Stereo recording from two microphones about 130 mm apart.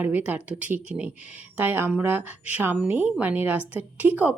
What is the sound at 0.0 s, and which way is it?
Speech, 15° right (ahead or behind).